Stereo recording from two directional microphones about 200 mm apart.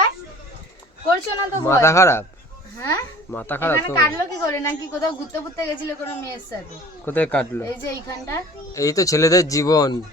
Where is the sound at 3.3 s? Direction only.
10° left (ahead or behind).